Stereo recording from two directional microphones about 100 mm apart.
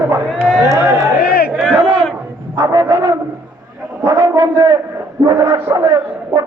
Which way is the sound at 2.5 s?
45° right (ahead or behind).